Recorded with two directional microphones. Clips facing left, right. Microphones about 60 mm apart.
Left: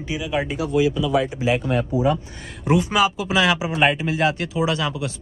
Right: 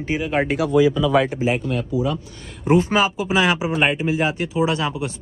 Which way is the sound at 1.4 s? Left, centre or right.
Right.